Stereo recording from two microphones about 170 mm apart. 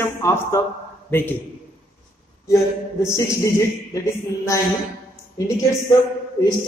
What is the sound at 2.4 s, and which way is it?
Speech, 15° left (ahead or behind).